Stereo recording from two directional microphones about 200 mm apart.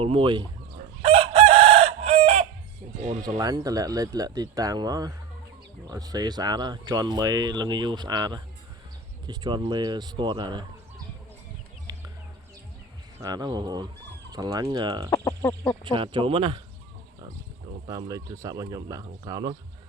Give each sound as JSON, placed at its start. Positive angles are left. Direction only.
{"t": 0.0, "sound": "speech", "side_deg": -25}
{"t": 1.0, "sound": "chicken", "side_deg": -25}
{"t": 3.0, "sound": "speech", "side_deg": -35}
{"t": 3.2, "sound": "speech", "side_deg": -20}
{"t": 13.1, "sound": "speech", "side_deg": -20}
{"t": 15.1, "sound": "speech", "side_deg": 10}
{"t": 15.8, "sound": "speech", "side_deg": -25}
{"t": 17.8, "sound": "speech", "side_deg": -20}